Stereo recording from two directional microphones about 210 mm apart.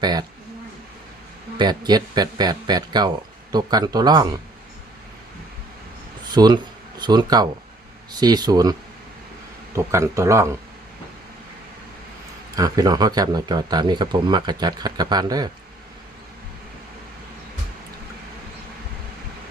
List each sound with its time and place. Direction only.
0.0 s speech: 20° right (ahead or behind)
1.5 s speech: 20° right (ahead or behind)
6.3 s speech: 20° right (ahead or behind)
9.7 s speech: 15° right (ahead or behind)
12.5 s speech: 15° right (ahead or behind)